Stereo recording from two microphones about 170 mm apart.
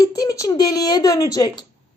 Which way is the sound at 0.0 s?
20° left (ahead or behind).